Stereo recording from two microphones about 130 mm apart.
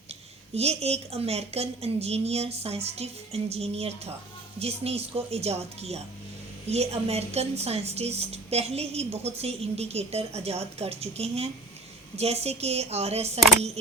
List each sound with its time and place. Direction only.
0.5 s a woman's voice: 55° right (ahead or behind)